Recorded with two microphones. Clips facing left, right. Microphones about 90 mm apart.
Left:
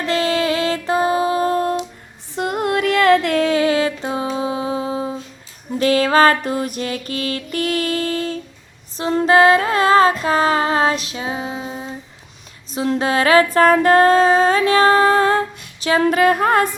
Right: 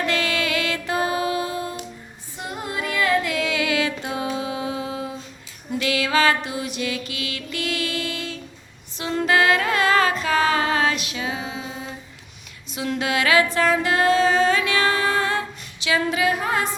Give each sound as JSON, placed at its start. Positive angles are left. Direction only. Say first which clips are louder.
{"t": 0.0, "sound": "music", "louder": "left 5 dB", "side_deg": 35}
{"t": 1.5, "sound": "music", "louder": "left 10 dB", "side_deg": 50}
{"t": 2.3, "sound": "music", "louder": "left 10 dB", "side_deg": 60}
{"t": 3.3, "sound": "a sound", "louder": "left 7 dB", "side_deg": 40}
{"t": 5.8, "sound": "mantra", "louder": "left 7 dB", "side_deg": 40}
{"t": 9.0, "sound": "music", "louder": "left 6 dB", "side_deg": 35}
{"t": 12.7, "sound": "a sound", "louder": "left 6 dB", "side_deg": 35}